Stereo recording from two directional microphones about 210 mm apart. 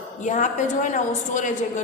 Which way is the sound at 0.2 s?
35° left (ahead or behind).